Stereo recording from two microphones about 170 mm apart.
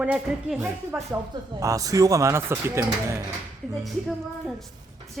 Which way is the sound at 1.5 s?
20° right (ahead or behind).